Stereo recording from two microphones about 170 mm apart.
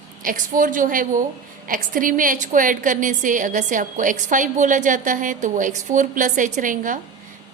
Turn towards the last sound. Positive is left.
turn(degrees=-50)  # may be behind; listen again after turning